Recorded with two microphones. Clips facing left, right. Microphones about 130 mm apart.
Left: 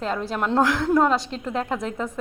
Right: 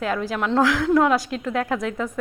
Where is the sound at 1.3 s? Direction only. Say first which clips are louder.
Right 2 dB; 30° left (ahead or behind).